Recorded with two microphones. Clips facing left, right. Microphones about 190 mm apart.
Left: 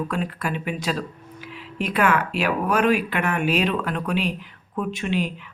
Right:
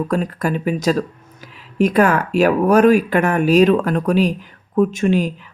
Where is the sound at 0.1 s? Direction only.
40° right (ahead or behind).